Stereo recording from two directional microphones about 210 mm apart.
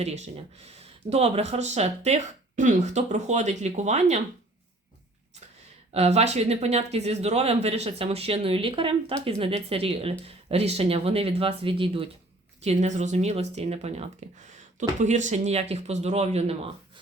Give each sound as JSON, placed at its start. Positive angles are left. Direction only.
{"t": 0.0, "sound": "speech", "side_deg": -30}
{"t": 5.9, "sound": "speech", "side_deg": -30}